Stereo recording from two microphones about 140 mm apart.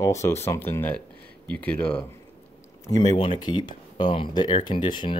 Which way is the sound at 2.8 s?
30° left (ahead or behind).